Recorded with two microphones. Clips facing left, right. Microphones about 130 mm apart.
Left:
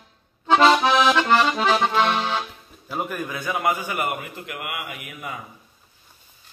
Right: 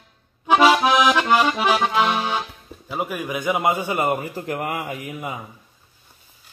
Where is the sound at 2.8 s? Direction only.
5° right (ahead or behind); by 5.3 s 25° right (ahead or behind).